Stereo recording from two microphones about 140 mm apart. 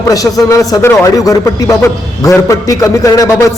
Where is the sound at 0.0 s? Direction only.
25° left (ahead or behind).